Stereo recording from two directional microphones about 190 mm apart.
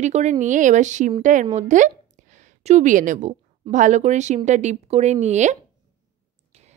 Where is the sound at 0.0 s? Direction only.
40° right (ahead or behind).